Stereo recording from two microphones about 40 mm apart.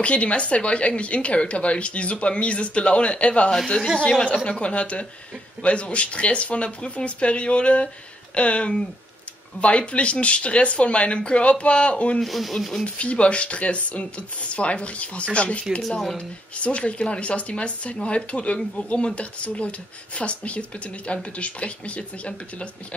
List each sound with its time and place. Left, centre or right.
0.0 s speech: left
3.5 s speech: centre
4.5 s speech: left
12.2 s speech: centre
12.8 s speech: left